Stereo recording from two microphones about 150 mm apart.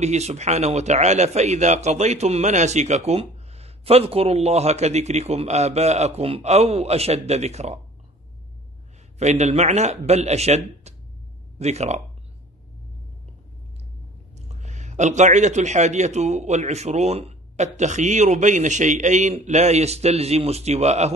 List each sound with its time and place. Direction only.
0.0 s a man's voice: 50° right (ahead or behind)
9.2 s a man's voice: 45° right (ahead or behind)
14.3 s a man's voice: 50° right (ahead or behind)